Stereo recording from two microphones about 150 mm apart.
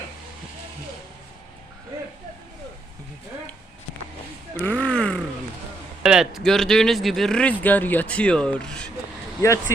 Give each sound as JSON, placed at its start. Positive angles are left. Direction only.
{"t": 4.6, "sound": "grunt", "side_deg": 10}
{"t": 6.0, "sound": "speech", "side_deg": -5}
{"t": 9.4, "sound": "speech", "side_deg": 20}